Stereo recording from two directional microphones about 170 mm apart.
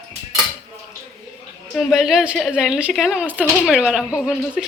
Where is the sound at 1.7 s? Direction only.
Centre (ahead or behind).